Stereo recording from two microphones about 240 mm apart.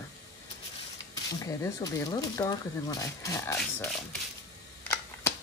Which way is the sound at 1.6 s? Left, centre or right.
Centre.